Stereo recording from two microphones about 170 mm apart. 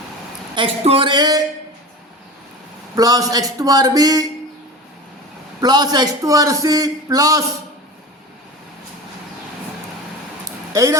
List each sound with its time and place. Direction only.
0.5 s a man's voice: 30° right (ahead or behind)
2.9 s a man's voice: 20° right (ahead or behind)
5.5 s a man's voice: 25° right (ahead or behind)